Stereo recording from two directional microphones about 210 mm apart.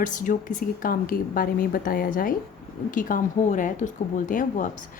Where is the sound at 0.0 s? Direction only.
40° left (ahead or behind).